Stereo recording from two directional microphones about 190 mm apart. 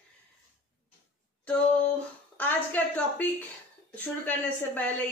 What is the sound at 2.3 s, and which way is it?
A woman's voice, 10° left (ahead or behind).